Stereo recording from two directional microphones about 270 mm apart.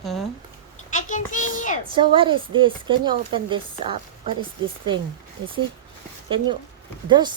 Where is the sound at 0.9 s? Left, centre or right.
Left.